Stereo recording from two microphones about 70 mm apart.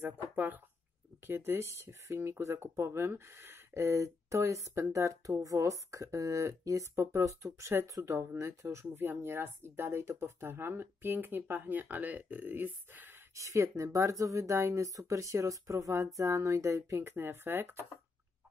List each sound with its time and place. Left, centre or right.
1.2 s speech: right
13.3 s speech: right
17.0 s speech: right